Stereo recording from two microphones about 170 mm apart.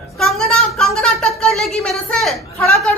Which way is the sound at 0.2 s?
Centre (ahead or behind).